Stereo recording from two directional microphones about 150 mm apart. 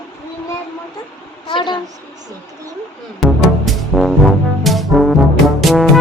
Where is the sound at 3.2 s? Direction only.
Centre (ahead or behind).